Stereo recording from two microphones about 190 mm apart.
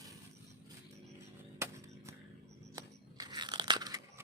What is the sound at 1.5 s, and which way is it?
Music, 15° right (ahead or behind).